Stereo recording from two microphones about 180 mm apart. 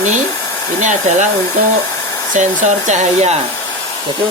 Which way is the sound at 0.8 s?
45° right (ahead or behind).